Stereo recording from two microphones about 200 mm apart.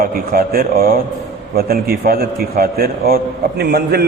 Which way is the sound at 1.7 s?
50° right (ahead or behind).